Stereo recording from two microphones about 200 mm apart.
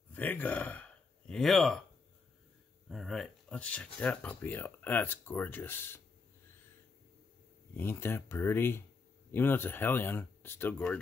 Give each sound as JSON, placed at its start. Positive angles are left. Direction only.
{"t": 0.1, "sound": "speech", "side_deg": 10}
{"t": 2.9, "sound": "speech", "side_deg": 0}
{"t": 7.7, "sound": "speech", "side_deg": 10}